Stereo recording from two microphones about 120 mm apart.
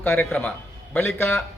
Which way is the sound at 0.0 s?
15° left (ahead or behind).